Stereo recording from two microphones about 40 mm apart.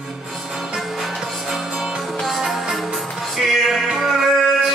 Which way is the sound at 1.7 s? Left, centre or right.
Centre.